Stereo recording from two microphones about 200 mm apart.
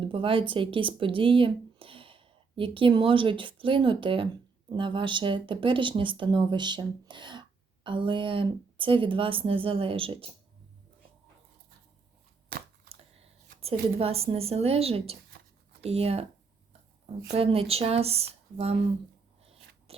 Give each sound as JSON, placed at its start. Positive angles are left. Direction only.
{"t": 0.0, "sound": "speech", "side_deg": -25}
{"t": 12.5, "sound": "a sound", "side_deg": -45}
{"t": 14.0, "sound": "speech", "side_deg": -30}
{"t": 17.3, "sound": "speech", "side_deg": -30}
{"t": 19.9, "sound": "biting", "side_deg": -30}